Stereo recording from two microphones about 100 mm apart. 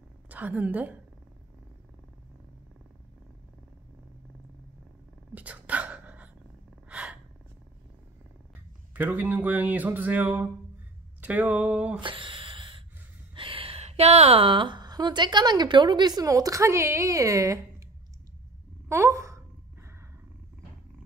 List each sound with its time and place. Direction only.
0.3 s a woman's voice: 15° right (ahead or behind)
5.3 s dog: 15° right (ahead or behind)
6.9 s gasp: 10° right (ahead or behind)
8.9 s speech: 15° right (ahead or behind)
12.0 s a sound: 60° right (ahead or behind)
13.3 s a woman's voice: 60° right (ahead or behind); by 17.8 s 30° right (ahead or behind)
18.9 s sigh: 30° right (ahead or behind)